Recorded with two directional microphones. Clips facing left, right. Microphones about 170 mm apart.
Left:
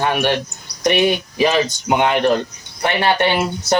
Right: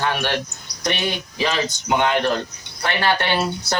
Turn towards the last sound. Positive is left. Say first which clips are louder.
# left 4 dB
turn(degrees=15)  # may be behind; listen again after turning